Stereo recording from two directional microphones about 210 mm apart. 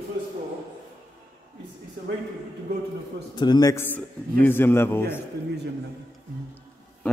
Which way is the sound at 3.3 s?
20° left (ahead or behind).